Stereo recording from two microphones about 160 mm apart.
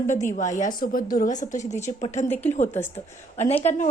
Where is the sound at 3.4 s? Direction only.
40° left (ahead or behind).